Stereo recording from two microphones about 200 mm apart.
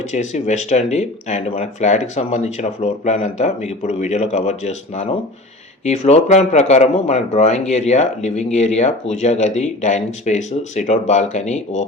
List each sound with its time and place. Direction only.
0.1 s speech: 35° left (ahead or behind)